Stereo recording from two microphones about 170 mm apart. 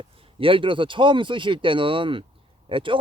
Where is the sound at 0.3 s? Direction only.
30° right (ahead or behind).